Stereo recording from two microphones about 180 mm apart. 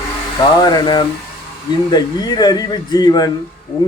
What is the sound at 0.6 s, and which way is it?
Speech, 25° left (ahead or behind).